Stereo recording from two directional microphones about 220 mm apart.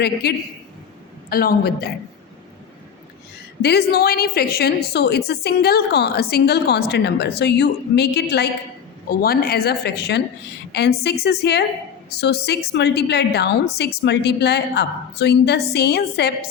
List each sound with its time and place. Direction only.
0.0 s a woman's voice: 45° left (ahead or behind)
3.6 s a woman's voice: 45° left (ahead or behind)